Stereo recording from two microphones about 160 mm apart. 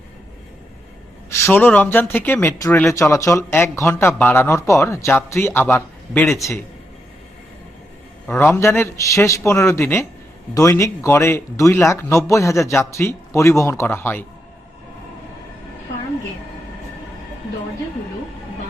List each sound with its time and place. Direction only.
1.4 s speech: 10° left (ahead or behind)
8.3 s speech: 15° left (ahead or behind)